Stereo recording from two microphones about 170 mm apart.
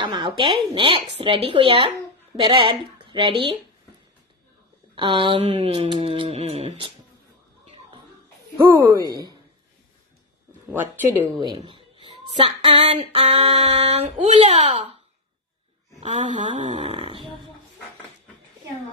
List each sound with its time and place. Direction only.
0.0 s child singing: 30° right (ahead or behind)
2.3 s a woman's voice: 30° right (ahead or behind)
4.9 s child singing: 30° right (ahead or behind)
8.5 s speech: 15° right (ahead or behind)
11.6 s child singing: 30° right (ahead or behind)
16.0 s child singing: 40° right (ahead or behind)